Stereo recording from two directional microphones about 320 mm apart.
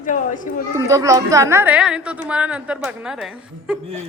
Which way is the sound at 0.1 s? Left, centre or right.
Left.